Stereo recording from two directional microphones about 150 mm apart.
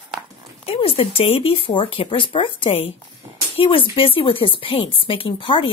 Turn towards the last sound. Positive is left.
turn(degrees=35)  # may be behind; listen again after turning